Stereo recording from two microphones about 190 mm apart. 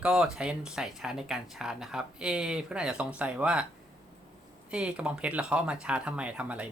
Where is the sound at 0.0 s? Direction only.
5° right (ahead or behind).